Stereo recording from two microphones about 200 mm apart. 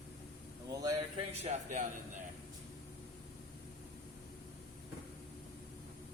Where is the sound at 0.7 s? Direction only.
20° right (ahead or behind).